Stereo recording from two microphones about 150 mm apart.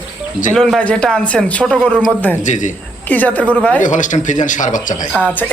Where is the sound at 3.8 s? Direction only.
60° left (ahead or behind).